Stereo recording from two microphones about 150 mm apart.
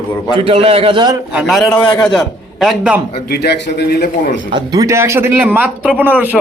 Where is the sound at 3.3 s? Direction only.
90° left.